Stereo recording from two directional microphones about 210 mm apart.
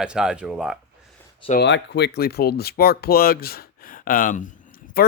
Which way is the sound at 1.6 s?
55° left (ahead or behind).